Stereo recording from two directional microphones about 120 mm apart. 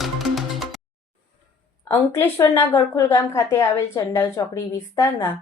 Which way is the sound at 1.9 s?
20° left (ahead or behind).